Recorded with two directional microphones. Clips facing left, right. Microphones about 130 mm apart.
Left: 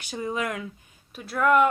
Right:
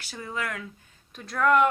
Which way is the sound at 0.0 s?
20° left (ahead or behind).